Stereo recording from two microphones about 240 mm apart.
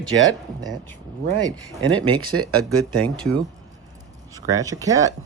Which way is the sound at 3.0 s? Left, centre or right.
Right.